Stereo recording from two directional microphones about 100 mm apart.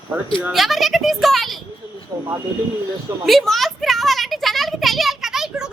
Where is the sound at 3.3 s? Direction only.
Centre (ahead or behind).